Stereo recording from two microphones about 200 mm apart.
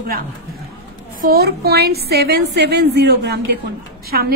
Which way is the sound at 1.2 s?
50° right (ahead or behind).